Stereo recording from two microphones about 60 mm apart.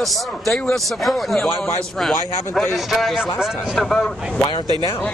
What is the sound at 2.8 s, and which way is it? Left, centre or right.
A man's voice, centre.